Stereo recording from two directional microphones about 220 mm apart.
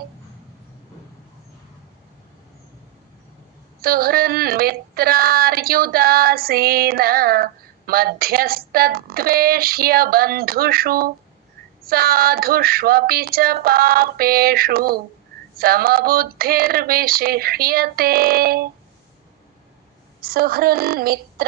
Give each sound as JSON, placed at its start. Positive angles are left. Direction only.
{"t": 3.8, "sound": "speech", "side_deg": -45}
{"t": 20.2, "sound": "speech", "side_deg": -45}